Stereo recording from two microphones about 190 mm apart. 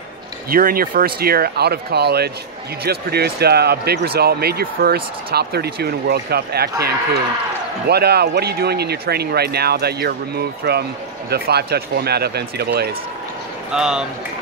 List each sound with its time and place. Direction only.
0.5 s speech: 50° right (ahead or behind)
7.9 s speech: 60° right (ahead or behind)
13.7 s speech: 5° right (ahead or behind)